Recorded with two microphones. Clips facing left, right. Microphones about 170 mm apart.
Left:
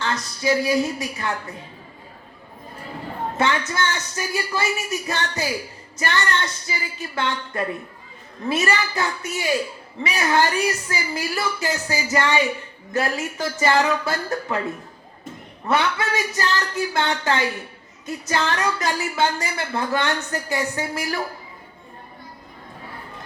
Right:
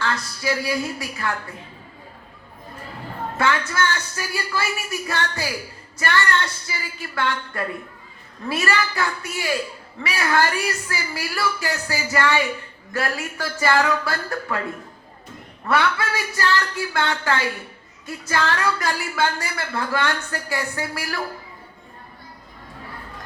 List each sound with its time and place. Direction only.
0.0 s a woman's voice: 20° left (ahead or behind)
3.3 s a woman's voice: 20° left (ahead or behind)
15.6 s a woman's voice: 20° left (ahead or behind)